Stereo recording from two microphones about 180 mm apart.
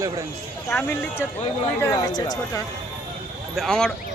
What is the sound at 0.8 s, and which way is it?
Speech, 15° left (ahead or behind).